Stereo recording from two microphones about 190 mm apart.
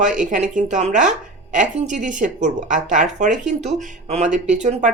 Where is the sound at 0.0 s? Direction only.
40° right (ahead or behind).